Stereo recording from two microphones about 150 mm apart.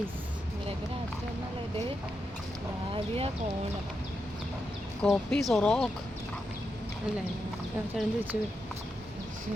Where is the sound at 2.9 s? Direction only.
40° right (ahead or behind).